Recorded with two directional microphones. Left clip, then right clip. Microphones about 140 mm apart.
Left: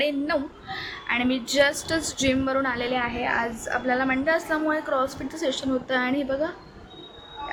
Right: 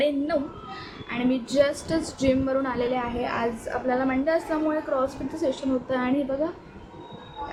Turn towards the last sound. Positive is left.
turn(degrees=-15)  # may be behind; listen again after turning